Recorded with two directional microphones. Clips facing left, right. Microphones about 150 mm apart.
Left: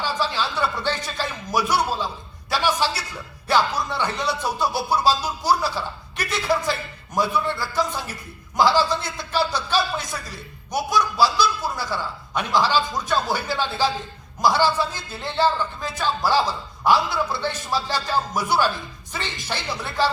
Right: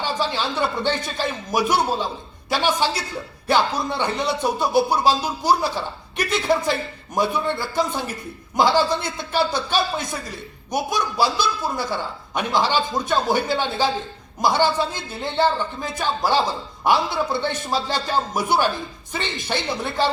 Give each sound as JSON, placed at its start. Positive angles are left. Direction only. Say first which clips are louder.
{"t": 0.0, "sound": "a man's voice", "louder": "right 1 dB", "side_deg": -20}